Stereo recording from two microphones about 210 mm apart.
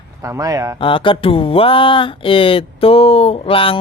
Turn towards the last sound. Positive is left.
turn(degrees=25)  # may be behind; listen again after turning